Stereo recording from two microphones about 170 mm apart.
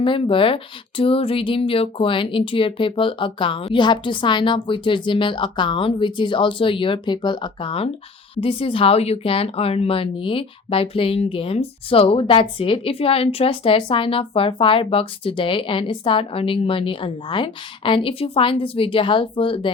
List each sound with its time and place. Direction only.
0.0 s speech: 30° left (ahead or behind)